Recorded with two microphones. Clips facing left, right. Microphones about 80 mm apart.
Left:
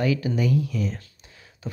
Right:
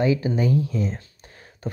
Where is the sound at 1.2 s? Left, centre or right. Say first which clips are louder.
Right 3 dB; right.